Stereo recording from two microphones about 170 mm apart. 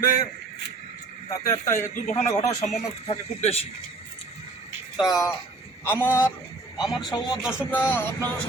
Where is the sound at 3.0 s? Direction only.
35° left (ahead or behind).